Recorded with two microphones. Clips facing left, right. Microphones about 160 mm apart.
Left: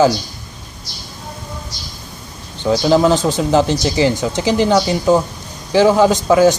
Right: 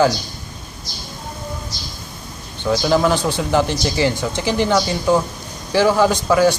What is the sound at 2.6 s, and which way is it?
Speech, 15° left (ahead or behind).